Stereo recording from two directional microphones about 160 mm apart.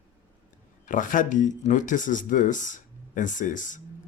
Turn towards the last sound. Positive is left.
turn(degrees=55)  # may be behind; listen again after turning